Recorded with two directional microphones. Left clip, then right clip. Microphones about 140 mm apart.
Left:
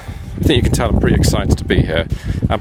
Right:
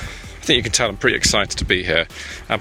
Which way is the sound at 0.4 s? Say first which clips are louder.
Left 1 dB; 75° left (ahead or behind).